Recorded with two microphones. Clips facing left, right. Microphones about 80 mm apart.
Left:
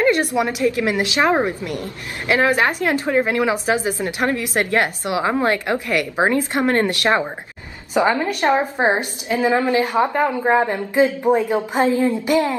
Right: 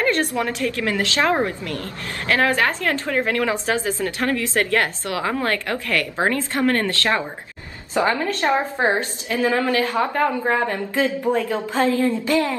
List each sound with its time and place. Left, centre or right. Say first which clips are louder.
0.0 s a woman's voice: left 3 dB; centre